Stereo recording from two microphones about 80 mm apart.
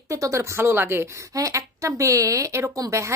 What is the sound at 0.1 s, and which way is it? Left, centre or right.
A woman's voice, right.